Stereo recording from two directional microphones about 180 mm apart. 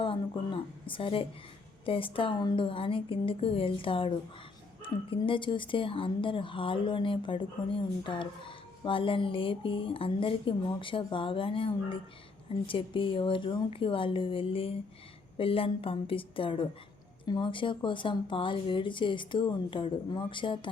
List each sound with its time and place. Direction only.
0.0 s a woman's voice: 30° left (ahead or behind)